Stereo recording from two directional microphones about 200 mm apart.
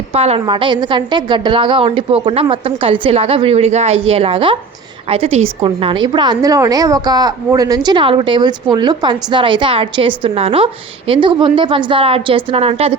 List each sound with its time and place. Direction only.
0.1 s a woman's voice: 30° right (ahead or behind)